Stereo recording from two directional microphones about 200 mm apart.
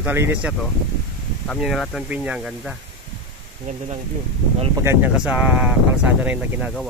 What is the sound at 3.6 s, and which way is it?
Speech, 30° right (ahead or behind).